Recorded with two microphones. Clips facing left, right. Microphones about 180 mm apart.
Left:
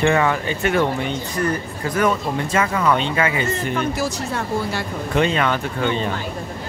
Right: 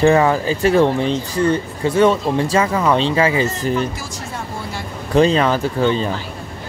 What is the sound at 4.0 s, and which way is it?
Speech, 70° left (ahead or behind).